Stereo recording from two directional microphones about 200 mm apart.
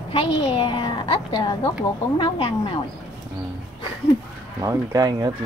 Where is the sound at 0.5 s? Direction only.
25° left (ahead or behind).